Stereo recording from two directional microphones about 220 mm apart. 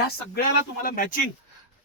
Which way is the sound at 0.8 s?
40° left (ahead or behind).